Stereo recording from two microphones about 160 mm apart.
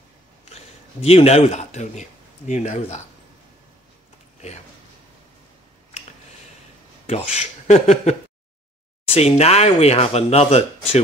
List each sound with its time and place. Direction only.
1.0 s speech: 40° left (ahead or behind)
7.1 s speech: 40° left (ahead or behind)